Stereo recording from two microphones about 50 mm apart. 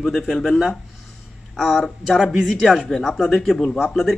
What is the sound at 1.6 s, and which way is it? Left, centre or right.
Speech, centre.